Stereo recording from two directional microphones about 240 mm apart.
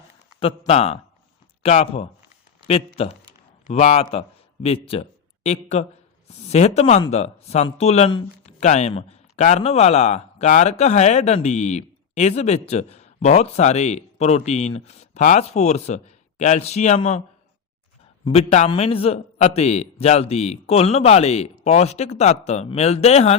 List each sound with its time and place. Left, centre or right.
0.3 s a man's voice: left
18.3 s a man's voice: left